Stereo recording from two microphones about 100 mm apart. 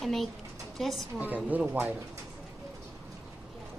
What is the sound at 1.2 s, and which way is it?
Speech, 15° right (ahead or behind).